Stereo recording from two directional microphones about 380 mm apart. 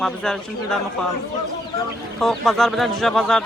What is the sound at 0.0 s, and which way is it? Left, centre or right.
Speech, centre.